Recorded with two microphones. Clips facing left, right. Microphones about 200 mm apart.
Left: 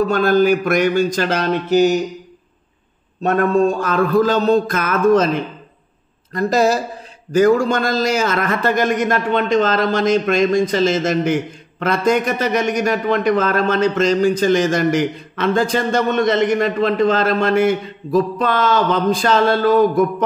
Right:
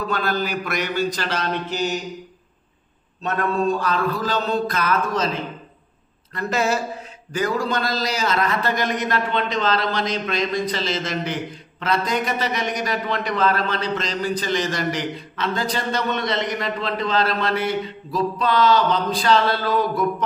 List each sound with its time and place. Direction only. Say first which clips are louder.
0.1 s a man's voice: left 10 dB; 50° left (ahead or behind)
3.2 s a man's voice: left 8 dB; 50° left (ahead or behind)
6.3 s speech: left 7 dB; 40° left (ahead or behind)
7.3 s a man's voice: left 9 dB; 50° left (ahead or behind)